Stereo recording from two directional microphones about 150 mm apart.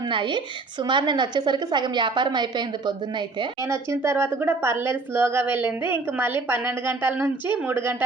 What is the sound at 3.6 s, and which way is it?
A woman's voice, 20° right (ahead or behind).